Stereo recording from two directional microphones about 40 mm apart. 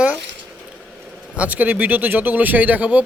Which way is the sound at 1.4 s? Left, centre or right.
Right.